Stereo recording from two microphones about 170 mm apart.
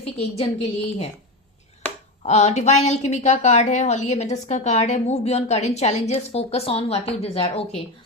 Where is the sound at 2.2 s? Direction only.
45° left (ahead or behind).